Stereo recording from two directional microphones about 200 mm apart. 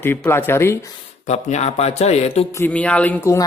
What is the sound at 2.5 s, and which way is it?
Speech, 10° left (ahead or behind).